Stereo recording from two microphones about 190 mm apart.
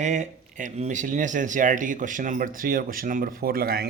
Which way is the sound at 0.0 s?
40° right (ahead or behind).